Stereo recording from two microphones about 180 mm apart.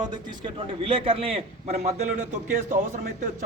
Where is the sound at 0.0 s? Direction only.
25° right (ahead or behind).